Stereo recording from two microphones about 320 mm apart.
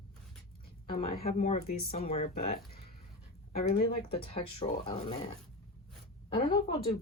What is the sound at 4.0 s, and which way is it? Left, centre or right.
Speech, centre.